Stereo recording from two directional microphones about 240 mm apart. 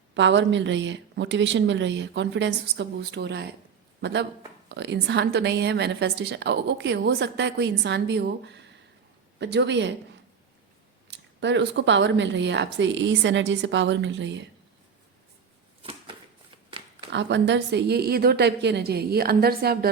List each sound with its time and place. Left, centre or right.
0.1 s a woman's voice: right
11.1 s a woman's voice: right
15.8 s a sound: right
17.1 s a woman's voice: right